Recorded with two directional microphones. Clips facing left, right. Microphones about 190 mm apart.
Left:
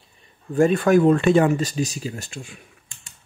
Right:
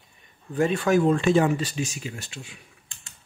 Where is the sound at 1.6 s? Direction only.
40° left (ahead or behind).